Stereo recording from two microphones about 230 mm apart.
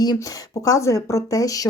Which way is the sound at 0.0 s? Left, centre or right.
Centre.